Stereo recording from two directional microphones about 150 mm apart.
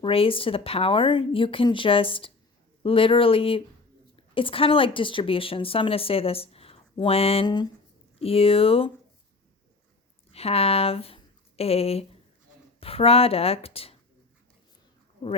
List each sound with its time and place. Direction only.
0.0 s a woman's voice: 40° left (ahead or behind)
8.2 s a woman's voice: 40° left (ahead or behind)
10.3 s a woman's voice: 40° left (ahead or behind)